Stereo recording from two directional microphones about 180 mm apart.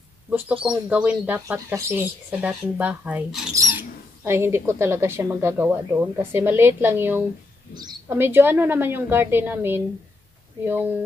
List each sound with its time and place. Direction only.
0.3 s speech: 5° right (ahead or behind)
7.7 s a woman's voice: 25° right (ahead or behind)
8.2 s speech: 10° right (ahead or behind)